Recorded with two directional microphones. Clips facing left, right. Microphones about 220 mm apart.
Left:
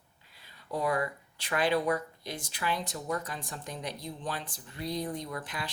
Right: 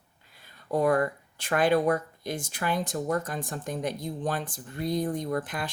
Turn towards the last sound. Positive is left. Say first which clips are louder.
# right 8 dB
turn(degrees=-50)  # may be behind; listen again after turning